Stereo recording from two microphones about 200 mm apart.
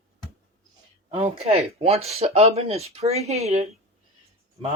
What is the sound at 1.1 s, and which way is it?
Speech, 30° right (ahead or behind).